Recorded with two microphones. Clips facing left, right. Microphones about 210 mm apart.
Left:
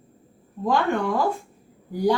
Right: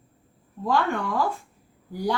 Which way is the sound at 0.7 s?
15° left (ahead or behind).